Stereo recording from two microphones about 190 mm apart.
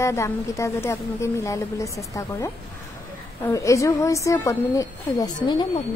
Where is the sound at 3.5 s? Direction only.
15° left (ahead or behind).